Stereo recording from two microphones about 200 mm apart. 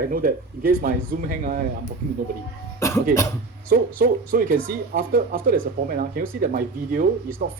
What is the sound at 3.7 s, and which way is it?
Speech, 45° right (ahead or behind).